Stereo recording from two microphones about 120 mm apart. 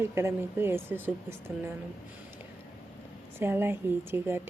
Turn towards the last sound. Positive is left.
turn(degrees=-20)  # may be behind; listen again after turning